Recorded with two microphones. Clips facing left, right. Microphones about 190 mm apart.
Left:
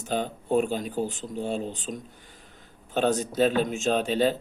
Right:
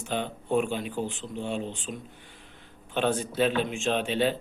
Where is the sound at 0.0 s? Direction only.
40° left (ahead or behind).